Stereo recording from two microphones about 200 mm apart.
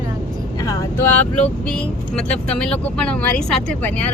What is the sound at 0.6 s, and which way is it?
Speech, 15° left (ahead or behind).